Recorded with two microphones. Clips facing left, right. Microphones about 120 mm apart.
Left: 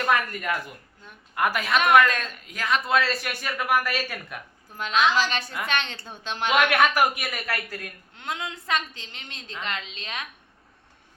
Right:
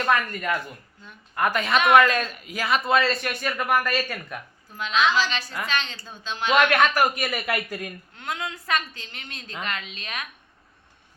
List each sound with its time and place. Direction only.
0.0 s speech: 10° left (ahead or behind)
5.1 s a woman's voice: 50° left (ahead or behind)
5.6 s speech: 60° left (ahead or behind)
6.5 s speech: 10° left (ahead or behind)
7.4 s speech: 15° right (ahead or behind)
8.1 s a woman's voice: 20° left (ahead or behind)